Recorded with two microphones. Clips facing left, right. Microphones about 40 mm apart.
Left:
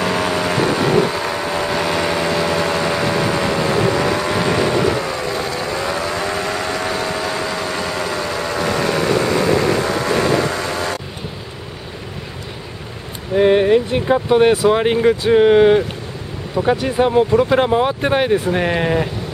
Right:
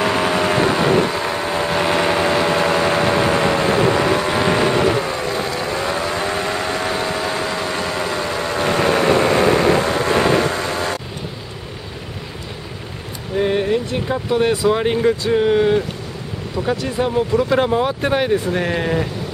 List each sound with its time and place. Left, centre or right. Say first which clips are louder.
0.0 s vehicle: right 1 dB; centre
10.5 s train: even; centre
13.4 s a sound: left 5 dB; left
14.6 s speech: left 2 dB; centre